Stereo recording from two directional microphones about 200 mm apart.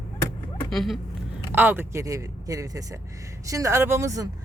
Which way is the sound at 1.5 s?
10° right (ahead or behind).